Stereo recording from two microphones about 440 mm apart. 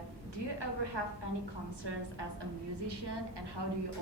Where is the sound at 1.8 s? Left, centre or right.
Right.